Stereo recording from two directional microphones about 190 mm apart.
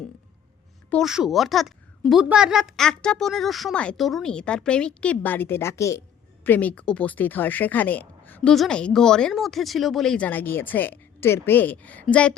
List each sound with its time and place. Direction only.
0.9 s a woman's voice: centre (ahead or behind)